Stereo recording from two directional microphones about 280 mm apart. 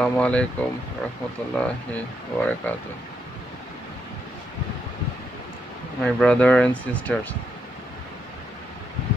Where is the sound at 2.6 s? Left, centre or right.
Centre.